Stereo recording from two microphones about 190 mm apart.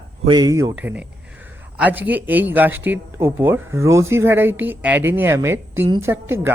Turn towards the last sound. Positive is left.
turn(degrees=-10)  # may be behind; listen again after turning